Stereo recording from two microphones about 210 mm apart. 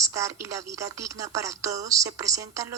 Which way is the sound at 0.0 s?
15° right (ahead or behind).